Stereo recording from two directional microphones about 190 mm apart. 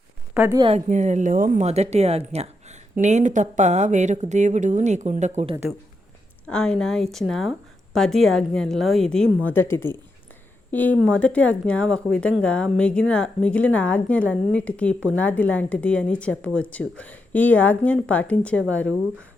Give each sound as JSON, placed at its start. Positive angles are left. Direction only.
{"t": 0.3, "sound": "a woman's voice", "side_deg": -10}
{"t": 0.6, "sound": "a woman's voice", "side_deg": -35}
{"t": 6.5, "sound": "a woman's voice", "side_deg": 5}